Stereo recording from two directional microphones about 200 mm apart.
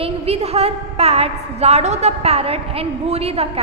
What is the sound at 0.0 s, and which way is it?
A woman's voice, 30° right (ahead or behind).